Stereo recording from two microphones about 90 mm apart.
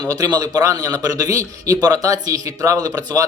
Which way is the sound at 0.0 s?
45° right (ahead or behind).